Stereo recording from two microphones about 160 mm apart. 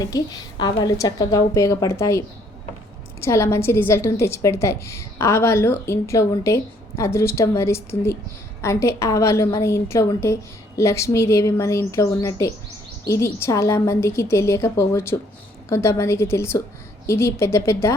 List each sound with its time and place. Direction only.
0.0 s a woman's voice: 25° left (ahead or behind)